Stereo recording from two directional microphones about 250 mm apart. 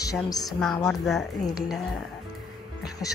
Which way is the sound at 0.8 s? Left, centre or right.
Centre.